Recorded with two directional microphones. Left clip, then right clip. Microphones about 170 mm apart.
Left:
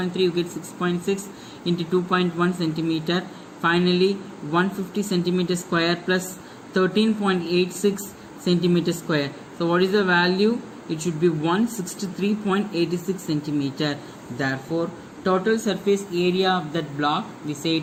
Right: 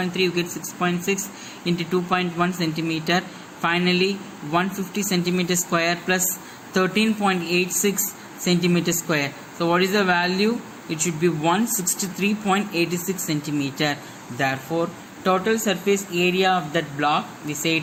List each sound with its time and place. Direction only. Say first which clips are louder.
0.0 s speech: even; 5° right (ahead or behind)